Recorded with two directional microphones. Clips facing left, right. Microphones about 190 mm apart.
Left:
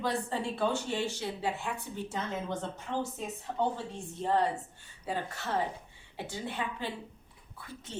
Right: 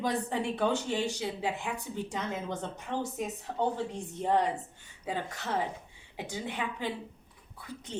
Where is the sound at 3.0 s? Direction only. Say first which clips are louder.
Right 2 dB; 15° right (ahead or behind).